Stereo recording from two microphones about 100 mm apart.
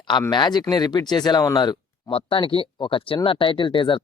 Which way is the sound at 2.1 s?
65° left (ahead or behind).